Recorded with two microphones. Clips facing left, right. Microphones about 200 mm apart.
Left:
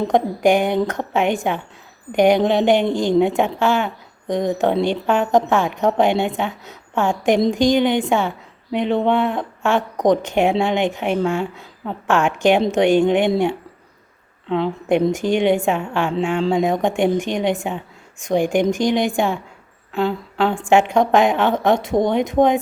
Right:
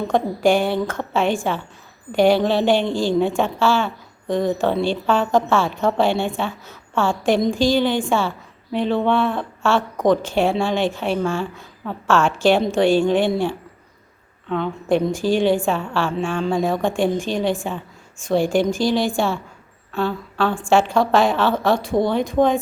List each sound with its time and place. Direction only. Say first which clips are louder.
0.1 s a woman's voice: even; 15° left (ahead or behind)
14.5 s a woman's voice: left 2 dB; 20° left (ahead or behind)